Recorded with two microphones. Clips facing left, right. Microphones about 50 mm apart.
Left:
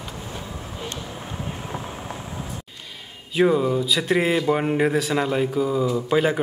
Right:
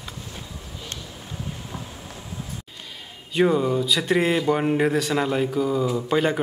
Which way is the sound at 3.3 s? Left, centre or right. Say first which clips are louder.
Left 1 dB; centre.